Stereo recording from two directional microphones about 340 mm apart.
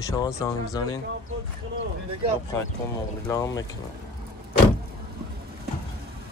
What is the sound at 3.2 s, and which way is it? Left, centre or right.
Speech, centre.